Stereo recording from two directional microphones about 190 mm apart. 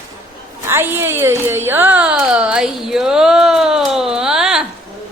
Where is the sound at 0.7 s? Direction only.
10° right (ahead or behind).